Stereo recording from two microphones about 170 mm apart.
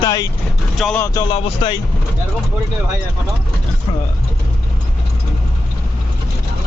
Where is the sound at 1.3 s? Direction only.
30° left (ahead or behind).